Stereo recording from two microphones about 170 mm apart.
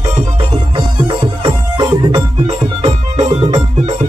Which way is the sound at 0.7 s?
30° right (ahead or behind).